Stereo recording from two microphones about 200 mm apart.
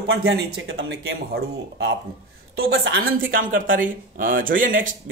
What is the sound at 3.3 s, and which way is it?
Speech, 45° right (ahead or behind).